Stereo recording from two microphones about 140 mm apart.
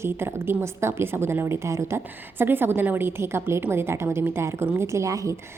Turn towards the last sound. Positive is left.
turn(degrees=-25)  # may be behind; listen again after turning